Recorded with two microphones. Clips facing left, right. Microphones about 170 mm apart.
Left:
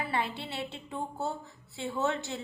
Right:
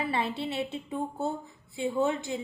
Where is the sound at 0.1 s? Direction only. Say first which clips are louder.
Right 3 dB; 25° right (ahead or behind).